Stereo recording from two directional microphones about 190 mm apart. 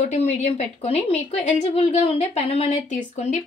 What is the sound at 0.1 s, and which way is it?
A woman's voice, 35° left (ahead or behind).